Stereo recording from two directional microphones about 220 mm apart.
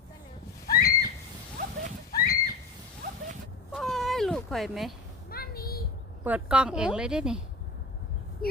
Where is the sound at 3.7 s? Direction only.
Centre (ahead or behind).